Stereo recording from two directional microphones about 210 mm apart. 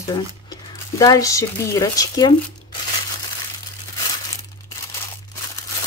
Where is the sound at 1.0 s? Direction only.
15° left (ahead or behind).